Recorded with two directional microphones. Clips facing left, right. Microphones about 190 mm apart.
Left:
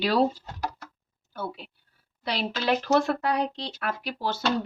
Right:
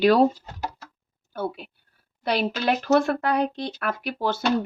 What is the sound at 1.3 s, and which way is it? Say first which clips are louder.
Speech: right 5 dB; 55° right (ahead or behind).